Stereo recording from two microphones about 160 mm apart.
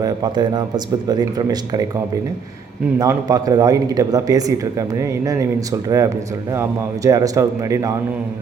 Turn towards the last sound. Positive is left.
turn(degrees=-20)  # may be behind; listen again after turning